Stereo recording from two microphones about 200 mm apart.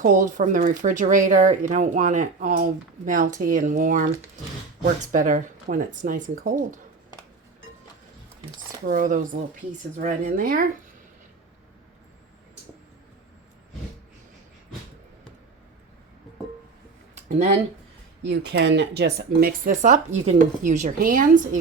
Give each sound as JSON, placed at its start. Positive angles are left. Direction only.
{"t": 0.0, "sound": "speech", "side_deg": -40}
{"t": 8.9, "sound": "speech", "side_deg": -40}
{"t": 17.2, "sound": "a sound", "side_deg": -35}
{"t": 18.3, "sound": "speech", "side_deg": -60}